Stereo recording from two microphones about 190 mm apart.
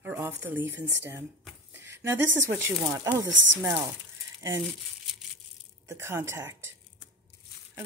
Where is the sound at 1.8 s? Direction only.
10° right (ahead or behind).